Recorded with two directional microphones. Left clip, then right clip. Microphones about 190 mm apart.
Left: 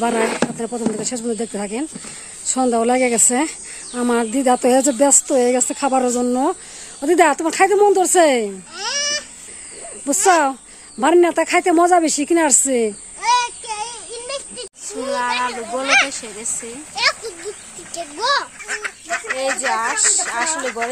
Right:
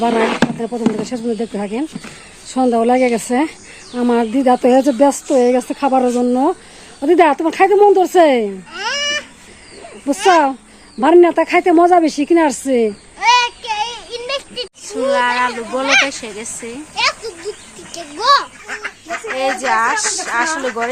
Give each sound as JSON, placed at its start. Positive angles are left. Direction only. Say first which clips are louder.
{"t": 0.2, "sound": "speech", "louder": "right 3 dB", "side_deg": -30}
{"t": 1.0, "sound": "speech", "louder": "right 3 dB", "side_deg": 10}
{"t": 10.2, "sound": "speech", "louder": "right 3 dB", "side_deg": 5}
{"t": 13.1, "sound": "child singing", "louder": "right 5 dB", "side_deg": -45}
{"t": 14.8, "sound": "speech", "louder": "right 6 dB", "side_deg": 5}
{"t": 15.8, "sound": "speech", "louder": "right 2 dB", "side_deg": 15}
{"t": 16.0, "sound": "speech", "louder": "right 4 dB", "side_deg": 0}
{"t": 16.9, "sound": "a sound", "louder": "right 1 dB", "side_deg": 20}
{"t": 17.9, "sound": "a child's voice", "louder": "right 6 dB", "side_deg": 25}
{"t": 18.7, "sound": "speech", "louder": "left 2 dB", "side_deg": 10}